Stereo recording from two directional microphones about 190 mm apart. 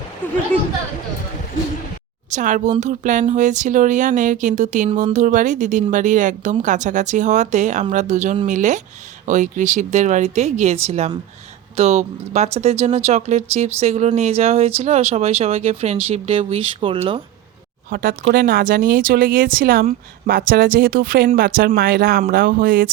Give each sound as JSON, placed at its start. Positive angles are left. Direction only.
{"t": 2.3, "sound": "speech", "side_deg": -40}
{"t": 17.9, "sound": "speech", "side_deg": -50}